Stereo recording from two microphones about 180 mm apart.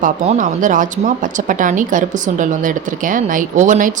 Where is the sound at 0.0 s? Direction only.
45° right (ahead or behind).